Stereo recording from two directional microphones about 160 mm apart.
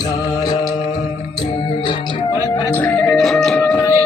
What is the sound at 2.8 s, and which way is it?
Music, 10° left (ahead or behind).